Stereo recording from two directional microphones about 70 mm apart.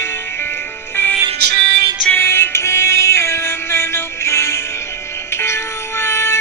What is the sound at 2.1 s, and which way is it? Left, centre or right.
Music, left.